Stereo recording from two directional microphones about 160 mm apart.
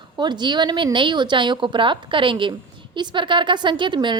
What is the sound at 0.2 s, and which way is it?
A woman's voice, 30° right (ahead or behind).